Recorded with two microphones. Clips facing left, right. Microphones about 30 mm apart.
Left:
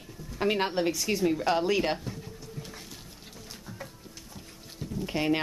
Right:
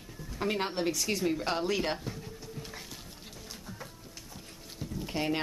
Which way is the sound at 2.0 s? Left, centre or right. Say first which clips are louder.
Left 1 dB; centre.